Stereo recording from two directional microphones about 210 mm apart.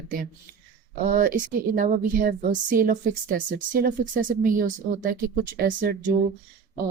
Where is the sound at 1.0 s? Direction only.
40° right (ahead or behind).